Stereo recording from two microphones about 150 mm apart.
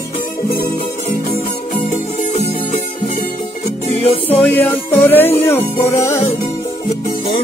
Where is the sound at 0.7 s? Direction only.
65° left (ahead or behind).